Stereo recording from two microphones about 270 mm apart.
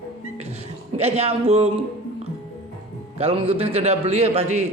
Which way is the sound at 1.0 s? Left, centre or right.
Right.